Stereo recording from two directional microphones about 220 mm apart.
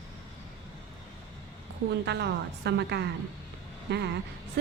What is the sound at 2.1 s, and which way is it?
A woman's voice, 50° right (ahead or behind).